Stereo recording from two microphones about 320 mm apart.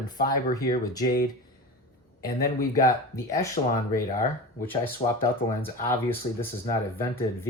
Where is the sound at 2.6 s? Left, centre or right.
Centre.